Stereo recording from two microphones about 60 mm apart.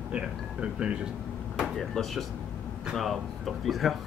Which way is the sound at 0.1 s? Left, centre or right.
Centre.